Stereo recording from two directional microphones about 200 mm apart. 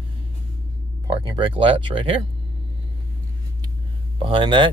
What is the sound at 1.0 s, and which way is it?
Speech, 25° right (ahead or behind).